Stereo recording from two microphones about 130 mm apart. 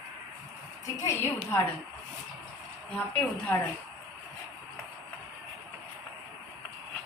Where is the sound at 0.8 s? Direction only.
25° left (ahead or behind).